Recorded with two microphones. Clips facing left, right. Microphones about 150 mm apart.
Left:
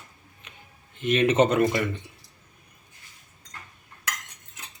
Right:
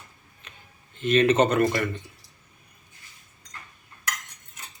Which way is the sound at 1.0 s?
15° left (ahead or behind).